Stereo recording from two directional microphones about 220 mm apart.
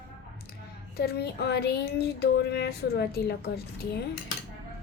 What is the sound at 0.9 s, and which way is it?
A child's voice, 45° left (ahead or behind).